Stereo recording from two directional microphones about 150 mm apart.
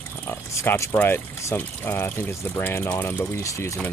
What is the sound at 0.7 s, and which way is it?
Speech, 15° left (ahead or behind).